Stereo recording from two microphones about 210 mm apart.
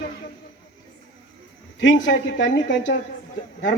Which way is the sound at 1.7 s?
60° left (ahead or behind).